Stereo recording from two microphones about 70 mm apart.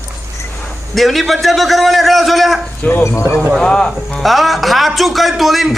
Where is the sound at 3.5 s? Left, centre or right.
Centre.